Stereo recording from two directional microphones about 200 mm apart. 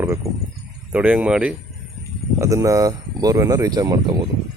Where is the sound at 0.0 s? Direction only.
10° right (ahead or behind).